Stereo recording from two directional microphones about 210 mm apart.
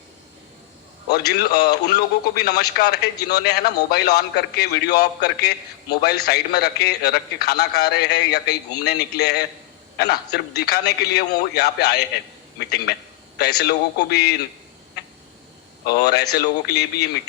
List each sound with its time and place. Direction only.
1.0 s a man's voice: 50° left (ahead or behind)
15.9 s a man's voice: 50° left (ahead or behind)